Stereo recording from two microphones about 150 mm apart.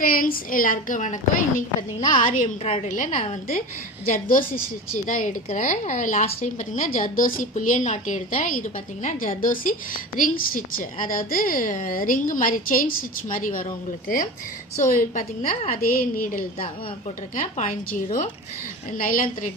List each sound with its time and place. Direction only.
0.0 s a woman's voice: 75° left (ahead or behind); by 6.8 s 50° left (ahead or behind)
6.9 s a woman's voice: 65° left (ahead or behind)
15.8 s a woman's voice: 70° left (ahead or behind)
17.3 s a woman's voice: 55° left (ahead or behind)